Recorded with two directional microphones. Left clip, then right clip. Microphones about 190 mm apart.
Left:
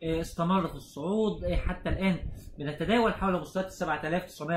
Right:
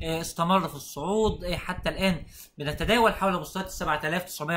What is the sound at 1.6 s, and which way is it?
Speech, 15° right (ahead or behind).